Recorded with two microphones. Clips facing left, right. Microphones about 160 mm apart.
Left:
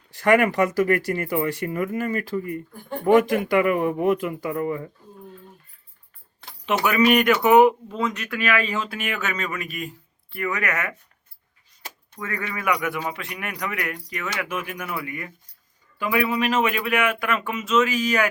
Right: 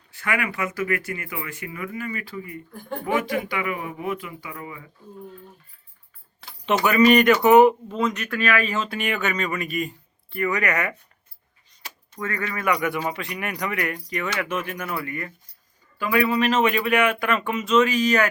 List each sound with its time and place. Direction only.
0.2 s speech: 40° left (ahead or behind)
6.7 s speech: 5° left (ahead or behind)
7.9 s speech: 15° right (ahead or behind)
8.3 s speech: 10° left (ahead or behind)
8.9 s speech: centre (ahead or behind)
12.3 s speech: 10° left (ahead or behind)